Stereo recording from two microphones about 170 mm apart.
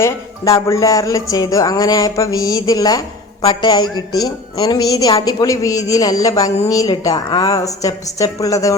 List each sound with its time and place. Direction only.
0.0 s a woman's voice: 15° left (ahead or behind)